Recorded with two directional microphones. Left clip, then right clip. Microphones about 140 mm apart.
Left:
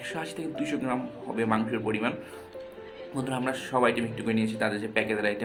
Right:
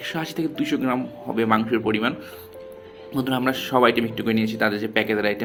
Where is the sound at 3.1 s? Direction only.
30° right (ahead or behind).